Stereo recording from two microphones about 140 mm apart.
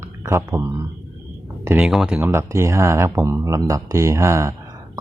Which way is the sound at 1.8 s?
5° right (ahead or behind).